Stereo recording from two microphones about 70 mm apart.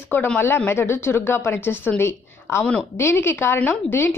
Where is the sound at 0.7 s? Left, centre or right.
Left.